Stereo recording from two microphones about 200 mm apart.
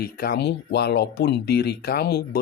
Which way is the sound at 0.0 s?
50° left (ahead or behind).